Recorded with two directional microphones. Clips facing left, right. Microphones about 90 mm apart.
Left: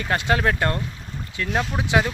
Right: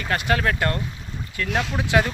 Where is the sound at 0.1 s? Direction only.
20° left (ahead or behind).